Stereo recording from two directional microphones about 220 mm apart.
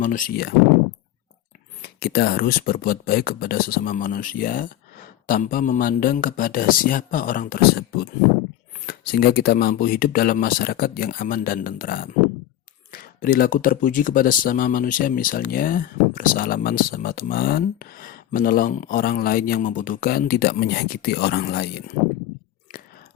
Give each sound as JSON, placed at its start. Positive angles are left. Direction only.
{"t": 0.0, "sound": "speech", "side_deg": 35}
{"t": 1.8, "sound": "speech", "side_deg": 45}